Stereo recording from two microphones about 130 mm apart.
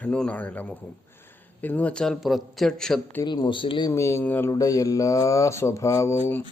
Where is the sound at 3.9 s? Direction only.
20° left (ahead or behind).